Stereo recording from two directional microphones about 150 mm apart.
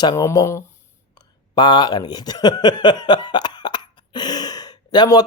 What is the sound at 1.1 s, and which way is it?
Speech, 30° left (ahead or behind).